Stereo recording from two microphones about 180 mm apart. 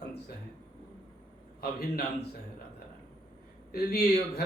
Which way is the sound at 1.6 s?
60° left (ahead or behind).